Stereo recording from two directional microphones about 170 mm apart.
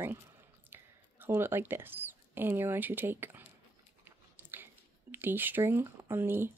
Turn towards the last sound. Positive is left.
turn(degrees=-15)  # may be behind; listen again after turning